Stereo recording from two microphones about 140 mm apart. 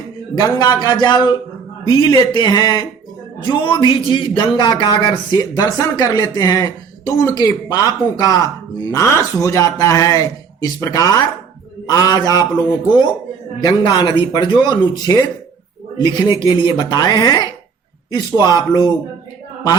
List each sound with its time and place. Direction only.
0.3 s a man's voice: 25° left (ahead or behind)